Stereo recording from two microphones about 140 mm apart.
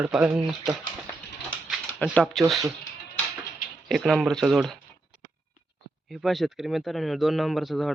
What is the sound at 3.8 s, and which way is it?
Speech, centre (ahead or behind).